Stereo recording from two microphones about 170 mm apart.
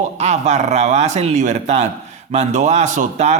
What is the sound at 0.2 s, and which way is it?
A man's voice, 40° right (ahead or behind).